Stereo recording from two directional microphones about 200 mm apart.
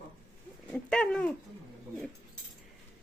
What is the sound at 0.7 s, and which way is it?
Speech, 5° left (ahead or behind).